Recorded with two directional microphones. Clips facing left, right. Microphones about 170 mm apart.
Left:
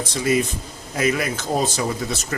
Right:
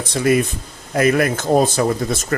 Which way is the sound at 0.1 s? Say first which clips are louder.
Right 5 dB; 55° right (ahead or behind).